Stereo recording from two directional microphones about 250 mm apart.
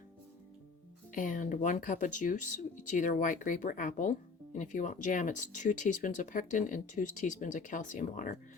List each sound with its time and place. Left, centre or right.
1.1 s speech: left